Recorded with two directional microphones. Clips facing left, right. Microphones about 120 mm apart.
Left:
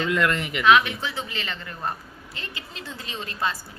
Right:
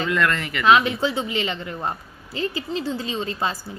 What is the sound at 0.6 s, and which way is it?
A woman's voice, 30° right (ahead or behind).